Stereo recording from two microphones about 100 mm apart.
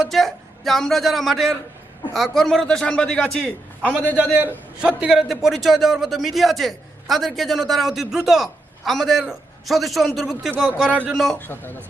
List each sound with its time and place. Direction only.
0.0 s a man's voice: centre (ahead or behind)
4.2 s a man's voice: 20° right (ahead or behind); by 11.3 s centre (ahead or behind)
11.3 s a man's voice: 20° left (ahead or behind)